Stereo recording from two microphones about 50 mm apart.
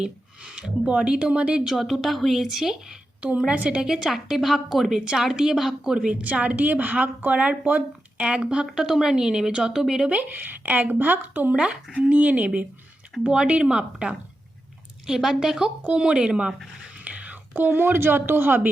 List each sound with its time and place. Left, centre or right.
0.0 s speech: centre
1.6 s a woman's voice: centre
3.2 s speech: right
3.8 s a woman's voice: centre
6.2 s speech: right
8.2 s a woman's voice: right
10.1 s a woman's voice: right; by 15.7 s centre
15.8 s speech: right
17.0 s whispering: right
17.5 s speech: right